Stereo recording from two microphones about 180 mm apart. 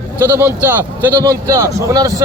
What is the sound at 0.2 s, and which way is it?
A man's voice, 15° right (ahead or behind).